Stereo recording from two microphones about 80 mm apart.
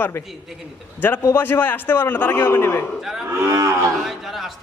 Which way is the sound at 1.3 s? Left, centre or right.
Left.